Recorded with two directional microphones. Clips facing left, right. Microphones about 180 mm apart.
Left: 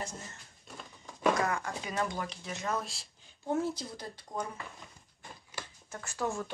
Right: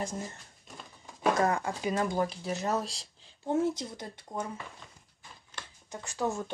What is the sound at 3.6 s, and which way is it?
Speech, 20° right (ahead or behind).